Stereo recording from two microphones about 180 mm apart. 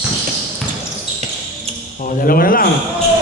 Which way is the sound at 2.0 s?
50° left (ahead or behind).